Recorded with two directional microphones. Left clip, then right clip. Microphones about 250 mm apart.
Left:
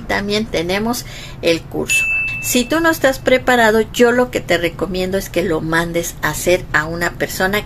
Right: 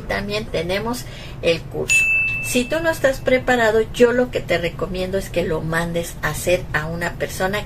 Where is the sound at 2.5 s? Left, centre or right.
Left.